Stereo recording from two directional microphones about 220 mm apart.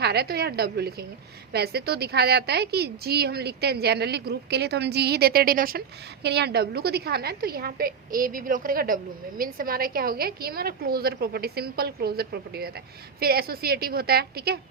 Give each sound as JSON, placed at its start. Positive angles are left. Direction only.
{"t": 0.0, "sound": "a woman's voice", "side_deg": -45}